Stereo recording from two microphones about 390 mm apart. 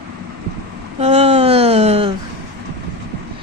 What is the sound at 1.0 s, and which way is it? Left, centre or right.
A man's voice, centre.